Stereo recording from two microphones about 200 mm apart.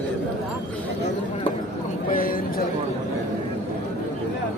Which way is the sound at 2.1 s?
45° left (ahead or behind).